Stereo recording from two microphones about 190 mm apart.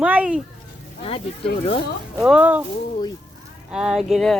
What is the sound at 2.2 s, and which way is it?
Speech, 5° right (ahead or behind).